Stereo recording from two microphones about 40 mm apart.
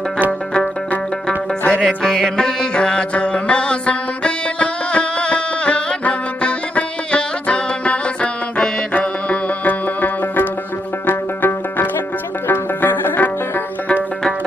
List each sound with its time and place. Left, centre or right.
1.7 s music: left